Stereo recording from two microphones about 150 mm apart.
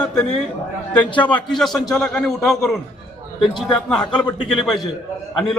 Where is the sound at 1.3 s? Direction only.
Centre (ahead or behind).